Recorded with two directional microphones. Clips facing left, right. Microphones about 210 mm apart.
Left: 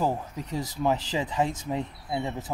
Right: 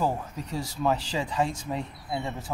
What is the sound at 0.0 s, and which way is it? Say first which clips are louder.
Speech: left 1 dB; 20° left (ahead or behind).